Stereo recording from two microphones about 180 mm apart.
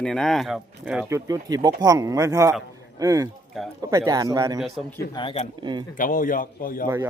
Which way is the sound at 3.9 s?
20° right (ahead or behind).